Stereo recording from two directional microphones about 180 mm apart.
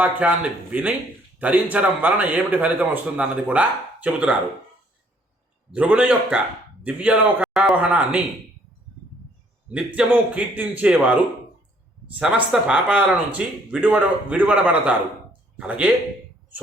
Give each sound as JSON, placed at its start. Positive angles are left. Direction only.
{"t": 0.0, "sound": "a man's voice", "side_deg": -10}
{"t": 5.7, "sound": "a man's voice", "side_deg": -5}
{"t": 9.6, "sound": "a man's voice", "side_deg": -5}
{"t": 12.2, "sound": "a man's voice", "side_deg": -5}